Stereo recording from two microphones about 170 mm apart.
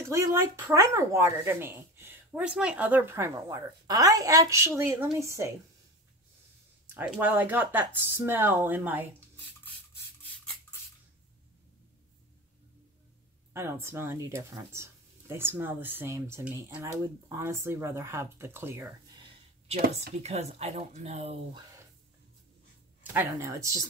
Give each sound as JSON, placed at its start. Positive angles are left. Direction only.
{"t": 0.0, "sound": "speech", "side_deg": -20}
{"t": 6.9, "sound": "speech", "side_deg": -10}
{"t": 10.2, "sound": "rub", "side_deg": 10}
{"t": 13.5, "sound": "speech", "side_deg": -15}
{"t": 19.1, "sound": "a sound", "side_deg": -35}
{"t": 20.2, "sound": "speech", "side_deg": -40}
{"t": 23.1, "sound": "speech", "side_deg": -15}